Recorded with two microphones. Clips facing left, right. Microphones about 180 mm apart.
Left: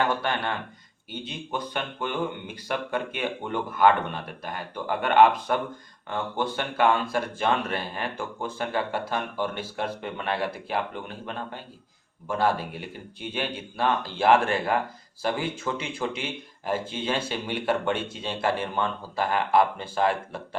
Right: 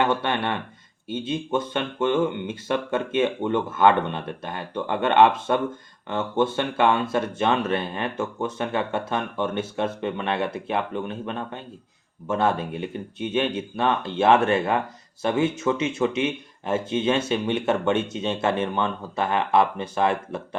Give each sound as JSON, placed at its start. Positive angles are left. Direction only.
{"t": 0.2, "sound": "speech", "side_deg": -25}